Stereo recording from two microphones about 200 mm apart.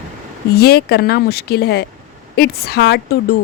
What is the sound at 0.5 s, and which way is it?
Speech, 50° left (ahead or behind).